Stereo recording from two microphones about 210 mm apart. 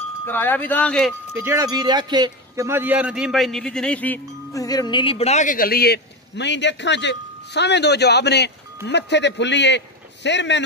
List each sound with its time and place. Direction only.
0.3 s speech: 10° left (ahead or behind)
1.3 s a man's voice: 10° right (ahead or behind); by 10.6 s 55° left (ahead or behind)